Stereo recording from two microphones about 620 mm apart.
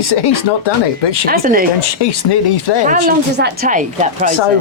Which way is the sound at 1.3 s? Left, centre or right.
Centre.